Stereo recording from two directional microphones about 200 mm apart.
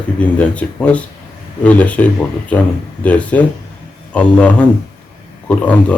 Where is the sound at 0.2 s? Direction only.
5° left (ahead or behind).